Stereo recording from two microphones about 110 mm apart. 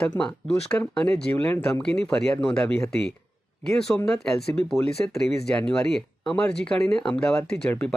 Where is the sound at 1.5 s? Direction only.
20° left (ahead or behind).